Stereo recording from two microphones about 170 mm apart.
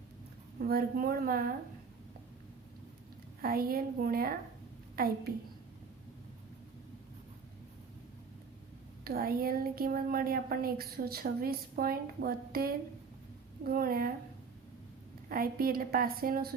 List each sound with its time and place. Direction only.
0.6 s a woman's voice: 60° right (ahead or behind)
3.4 s a woman's voice: 60° right (ahead or behind)
9.0 s a woman's voice: 60° right (ahead or behind)
15.3 s a woman's voice: 60° right (ahead or behind)